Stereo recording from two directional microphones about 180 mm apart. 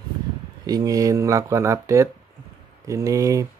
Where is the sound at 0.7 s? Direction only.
20° right (ahead or behind).